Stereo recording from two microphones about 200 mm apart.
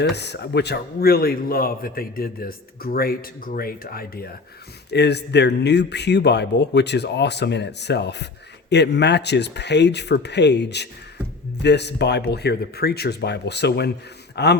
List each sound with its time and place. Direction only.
0.0 s a man's voice: 55° left (ahead or behind)